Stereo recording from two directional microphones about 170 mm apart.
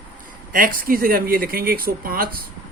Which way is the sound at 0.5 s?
55° right (ahead or behind).